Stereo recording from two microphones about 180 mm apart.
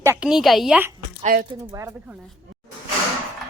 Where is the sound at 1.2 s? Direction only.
45° right (ahead or behind).